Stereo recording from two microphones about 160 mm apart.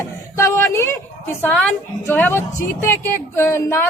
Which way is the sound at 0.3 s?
15° left (ahead or behind).